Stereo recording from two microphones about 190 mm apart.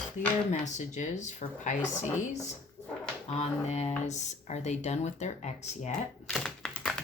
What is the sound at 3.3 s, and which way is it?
Speech, 35° left (ahead or behind).